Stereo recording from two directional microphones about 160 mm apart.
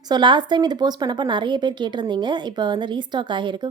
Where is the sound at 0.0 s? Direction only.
25° right (ahead or behind).